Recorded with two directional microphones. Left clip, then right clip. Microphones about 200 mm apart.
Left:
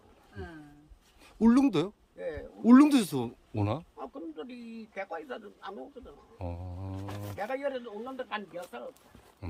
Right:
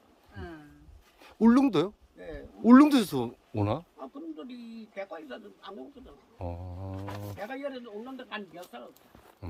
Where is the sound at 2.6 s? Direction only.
5° right (ahead or behind).